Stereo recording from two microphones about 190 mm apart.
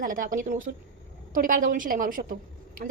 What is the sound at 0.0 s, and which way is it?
A woman's voice, 45° right (ahead or behind).